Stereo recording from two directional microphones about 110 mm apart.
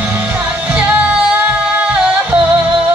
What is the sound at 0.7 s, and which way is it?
Music, 10° right (ahead or behind).